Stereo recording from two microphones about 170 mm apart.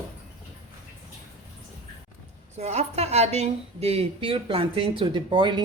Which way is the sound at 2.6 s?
40° right (ahead or behind).